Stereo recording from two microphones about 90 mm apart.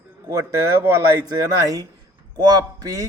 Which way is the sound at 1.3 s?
45° right (ahead or behind).